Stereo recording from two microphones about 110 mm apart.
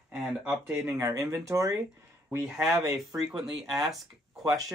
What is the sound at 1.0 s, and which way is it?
Speech, 30° right (ahead or behind).